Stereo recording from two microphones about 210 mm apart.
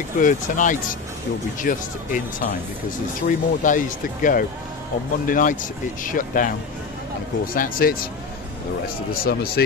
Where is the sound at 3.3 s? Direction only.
40° left (ahead or behind).